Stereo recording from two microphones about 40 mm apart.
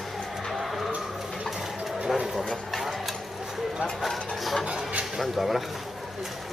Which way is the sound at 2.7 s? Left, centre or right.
Centre.